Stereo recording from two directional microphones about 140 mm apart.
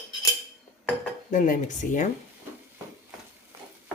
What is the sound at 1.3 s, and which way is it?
Speech, 65° left (ahead or behind).